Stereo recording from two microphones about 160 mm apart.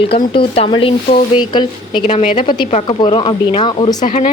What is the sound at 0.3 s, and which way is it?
A woman's voice, 35° left (ahead or behind).